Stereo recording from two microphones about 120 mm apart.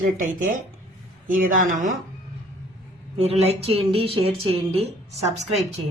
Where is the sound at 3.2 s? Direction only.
60° right (ahead or behind).